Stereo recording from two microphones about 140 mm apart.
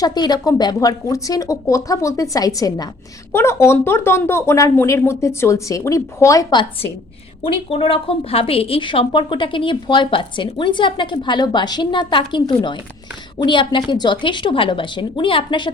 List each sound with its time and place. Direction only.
0.0 s a woman's voice: 30° left (ahead or behind)